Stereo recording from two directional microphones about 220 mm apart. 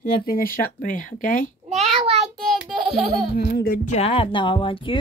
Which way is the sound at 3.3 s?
40° left (ahead or behind).